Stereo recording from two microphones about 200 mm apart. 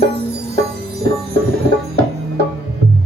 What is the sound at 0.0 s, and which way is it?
Wind chime, 55° right (ahead or behind).